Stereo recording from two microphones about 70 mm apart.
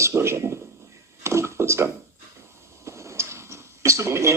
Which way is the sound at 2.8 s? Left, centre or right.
Right.